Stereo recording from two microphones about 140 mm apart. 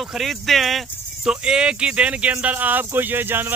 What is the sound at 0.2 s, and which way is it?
Speech, centre (ahead or behind).